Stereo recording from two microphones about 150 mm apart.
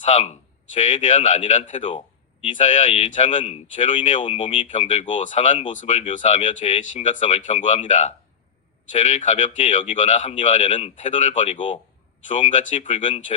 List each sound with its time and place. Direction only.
0.0 s speech: 50° left (ahead or behind)